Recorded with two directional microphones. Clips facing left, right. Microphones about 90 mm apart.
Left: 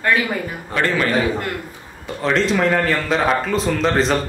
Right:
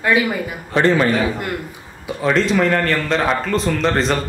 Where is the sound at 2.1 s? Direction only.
5° right (ahead or behind).